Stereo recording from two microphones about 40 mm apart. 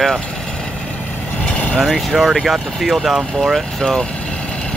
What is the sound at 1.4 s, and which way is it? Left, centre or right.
Vehicle, left.